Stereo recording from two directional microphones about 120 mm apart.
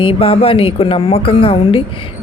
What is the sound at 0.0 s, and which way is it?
Speech, 50° left (ahead or behind).